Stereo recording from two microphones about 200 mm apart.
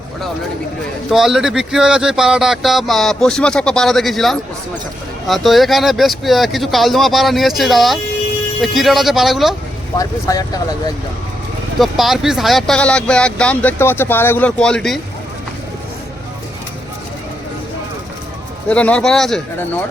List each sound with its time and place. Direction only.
1.1 s speech: centre (ahead or behind)
10.0 s speech: 15° left (ahead or behind)
11.8 s speech: centre (ahead or behind)
18.7 s speech: 5° left (ahead or behind)